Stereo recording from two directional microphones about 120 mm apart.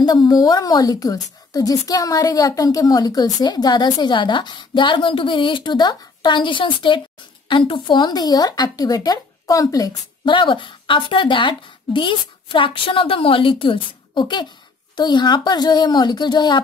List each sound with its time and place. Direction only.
0.0 s speech: 35° left (ahead or behind)
10.3 s speech: 45° left (ahead or behind)